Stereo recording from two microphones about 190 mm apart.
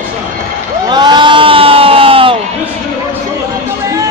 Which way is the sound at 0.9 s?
25° right (ahead or behind).